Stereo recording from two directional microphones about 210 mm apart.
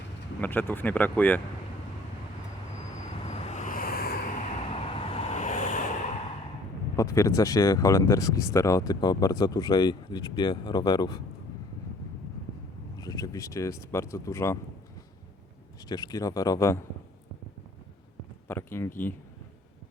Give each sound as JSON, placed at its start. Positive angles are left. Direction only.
{"t": 0.4, "sound": "speech", "side_deg": 10}
{"t": 3.2, "sound": "vehicle", "side_deg": 30}
{"t": 4.6, "sound": "vehicle", "side_deg": 25}
{"t": 6.9, "sound": "speech", "side_deg": 15}
{"t": 13.0, "sound": "speech", "side_deg": 15}
{"t": 15.9, "sound": "speech", "side_deg": 20}
{"t": 18.4, "sound": "speech", "side_deg": 10}